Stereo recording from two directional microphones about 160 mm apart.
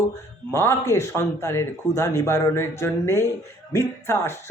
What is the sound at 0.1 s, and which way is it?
Speech, 15° left (ahead or behind).